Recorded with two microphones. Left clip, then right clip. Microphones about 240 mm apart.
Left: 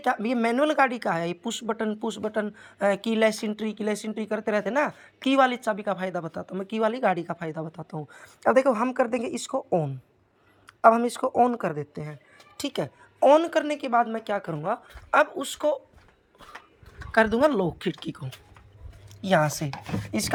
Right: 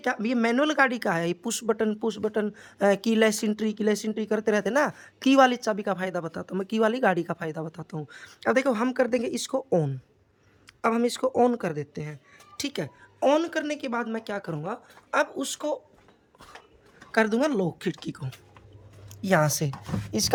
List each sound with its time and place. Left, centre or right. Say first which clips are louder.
0.0 s a woman's voice: left 1 dB; centre
17.1 s a woman's voice: left 3 dB; centre; by 20.3 s right